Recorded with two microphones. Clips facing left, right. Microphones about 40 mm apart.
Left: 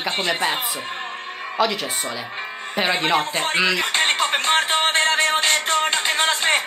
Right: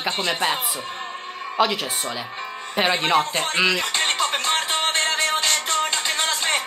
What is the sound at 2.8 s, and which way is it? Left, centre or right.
Speech, centre.